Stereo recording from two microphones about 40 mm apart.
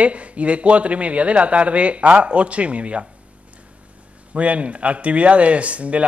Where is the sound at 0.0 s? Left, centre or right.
Right.